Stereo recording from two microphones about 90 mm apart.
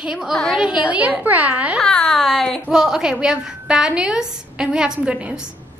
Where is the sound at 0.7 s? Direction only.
15° right (ahead or behind).